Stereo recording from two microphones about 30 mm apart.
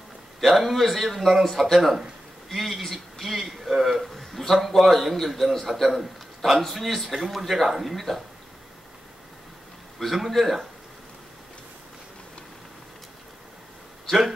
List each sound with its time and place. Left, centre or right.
0.4 s a man's voice: centre
10.0 s a man's voice: centre